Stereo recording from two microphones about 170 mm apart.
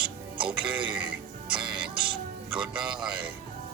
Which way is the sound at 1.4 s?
30° right (ahead or behind).